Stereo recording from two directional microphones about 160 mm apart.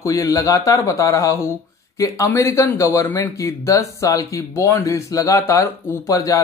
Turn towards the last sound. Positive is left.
turn(degrees=20)  # may be behind; listen again after turning